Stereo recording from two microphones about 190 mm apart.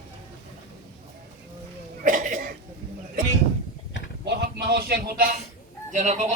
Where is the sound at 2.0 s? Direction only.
45° right (ahead or behind).